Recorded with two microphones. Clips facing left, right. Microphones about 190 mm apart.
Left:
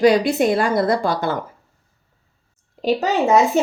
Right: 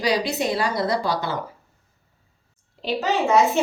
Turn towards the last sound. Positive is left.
turn(degrees=40)  # may be behind; listen again after turning